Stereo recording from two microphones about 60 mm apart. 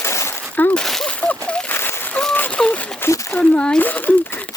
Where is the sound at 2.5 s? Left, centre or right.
Left.